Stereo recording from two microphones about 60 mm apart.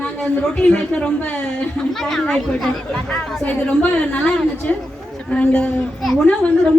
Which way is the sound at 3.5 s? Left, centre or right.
Left.